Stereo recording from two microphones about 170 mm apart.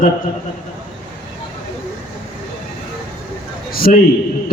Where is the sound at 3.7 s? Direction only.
60° left (ahead or behind).